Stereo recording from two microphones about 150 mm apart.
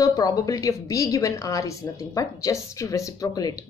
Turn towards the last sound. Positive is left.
turn(degrees=25)  # may be behind; listen again after turning